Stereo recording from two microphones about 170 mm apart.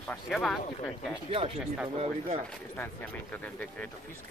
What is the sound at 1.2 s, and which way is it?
Speech, 35° right (ahead or behind).